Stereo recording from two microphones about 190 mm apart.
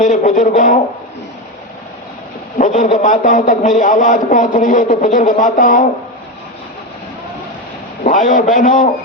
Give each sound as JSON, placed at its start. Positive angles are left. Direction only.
{"t": 0.0, "sound": "a man's voice", "side_deg": 40}
{"t": 2.6, "sound": "a man's voice", "side_deg": 40}
{"t": 8.0, "sound": "a man's voice", "side_deg": 45}